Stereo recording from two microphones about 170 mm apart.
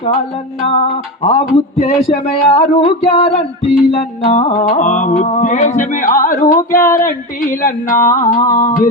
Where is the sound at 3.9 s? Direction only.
40° left (ahead or behind).